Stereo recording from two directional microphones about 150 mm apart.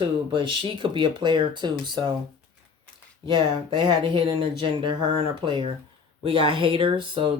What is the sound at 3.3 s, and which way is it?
Speech, 30° right (ahead or behind).